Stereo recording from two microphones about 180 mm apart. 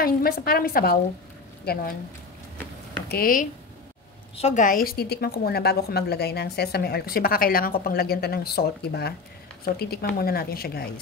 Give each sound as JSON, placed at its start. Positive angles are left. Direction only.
{"t": 0.0, "sound": "a woman's voice", "side_deg": 55}
{"t": 3.1, "sound": "speech", "side_deg": 55}
{"t": 4.4, "sound": "a woman's voice", "side_deg": 40}